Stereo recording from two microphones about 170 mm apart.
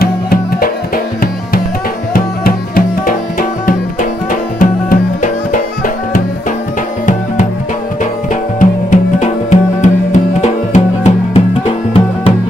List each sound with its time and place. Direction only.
0.0 s music: 60° left (ahead or behind)
2.1 s music: 60° left (ahead or behind)
8.5 s music: 45° left (ahead or behind)